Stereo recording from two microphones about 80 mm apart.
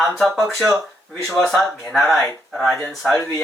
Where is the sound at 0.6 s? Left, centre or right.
Right.